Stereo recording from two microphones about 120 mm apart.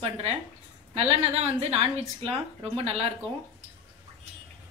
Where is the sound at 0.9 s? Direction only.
60° right (ahead or behind).